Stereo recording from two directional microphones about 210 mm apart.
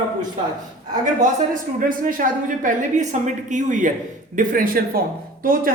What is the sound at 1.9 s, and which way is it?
A woman's voice, 40° right (ahead or behind).